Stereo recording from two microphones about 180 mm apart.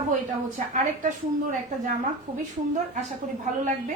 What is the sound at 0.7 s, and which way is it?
Speech, 45° right (ahead or behind).